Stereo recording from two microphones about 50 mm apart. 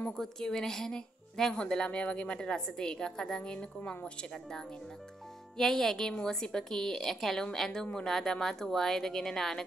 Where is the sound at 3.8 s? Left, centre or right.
Left.